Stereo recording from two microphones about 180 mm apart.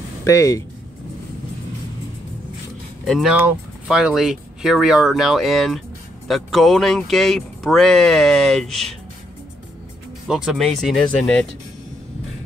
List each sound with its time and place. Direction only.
0.2 s speech: 15° left (ahead or behind)
3.1 s speech: centre (ahead or behind)
10.2 s speech: 5° right (ahead or behind)